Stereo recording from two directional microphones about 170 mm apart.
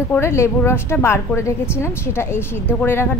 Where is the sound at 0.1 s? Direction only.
15° left (ahead or behind).